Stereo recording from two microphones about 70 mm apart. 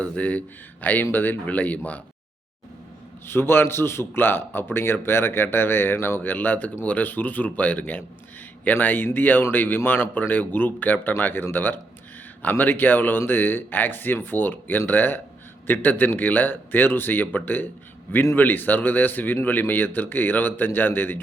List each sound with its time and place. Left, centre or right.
0.0 s speech: left
3.2 s a man's voice: left